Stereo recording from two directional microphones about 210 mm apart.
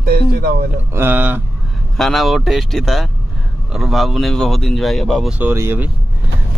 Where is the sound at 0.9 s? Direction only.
10° right (ahead or behind).